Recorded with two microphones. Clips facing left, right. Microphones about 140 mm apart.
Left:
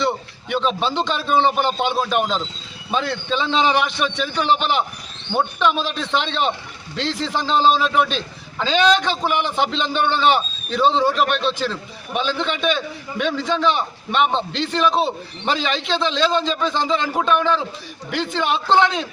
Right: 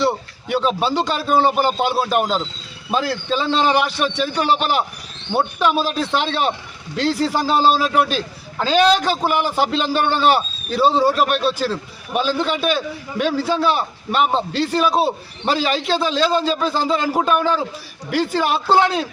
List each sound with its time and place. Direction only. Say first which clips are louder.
0.8 s a man's voice: right 2 dB; 10° right (ahead or behind)